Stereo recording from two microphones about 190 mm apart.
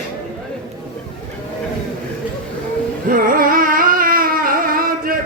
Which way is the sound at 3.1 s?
50° right (ahead or behind).